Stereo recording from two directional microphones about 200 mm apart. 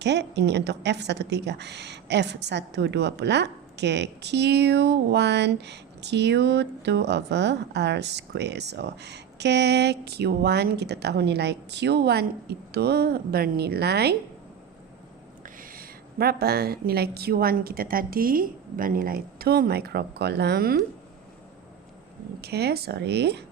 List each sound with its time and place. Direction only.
0.0 s a woman's voice: 60° right (ahead or behind)
15.4 s a woman's voice: 45° right (ahead or behind)
22.4 s a woman's voice: 55° right (ahead or behind)